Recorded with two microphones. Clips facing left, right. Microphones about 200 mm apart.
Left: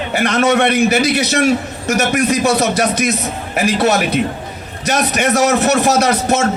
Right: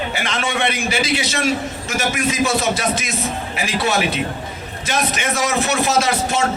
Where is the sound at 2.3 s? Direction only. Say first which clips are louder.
Left 4 dB; 65° left (ahead or behind).